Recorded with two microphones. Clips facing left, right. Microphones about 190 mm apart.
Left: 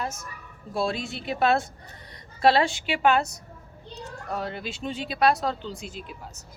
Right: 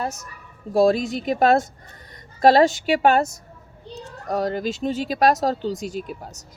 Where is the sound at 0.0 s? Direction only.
40° right (ahead or behind).